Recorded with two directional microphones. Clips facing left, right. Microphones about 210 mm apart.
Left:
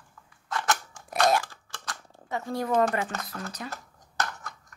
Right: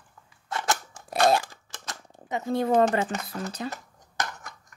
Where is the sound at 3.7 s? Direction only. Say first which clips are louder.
Right 2 dB; 15° right (ahead or behind).